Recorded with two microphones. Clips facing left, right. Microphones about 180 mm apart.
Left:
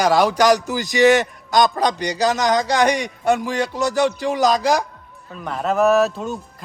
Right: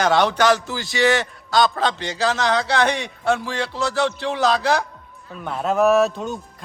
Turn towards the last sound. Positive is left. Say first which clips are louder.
# even
turn(degrees=0)  # may be behind; listen again after turning